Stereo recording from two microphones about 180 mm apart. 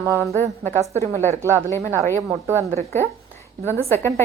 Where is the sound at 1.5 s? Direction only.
10° left (ahead or behind).